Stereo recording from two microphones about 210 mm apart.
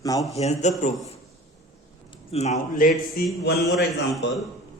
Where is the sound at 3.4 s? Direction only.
50° left (ahead or behind).